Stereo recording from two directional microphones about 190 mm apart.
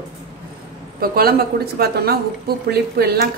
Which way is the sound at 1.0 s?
55° right (ahead or behind).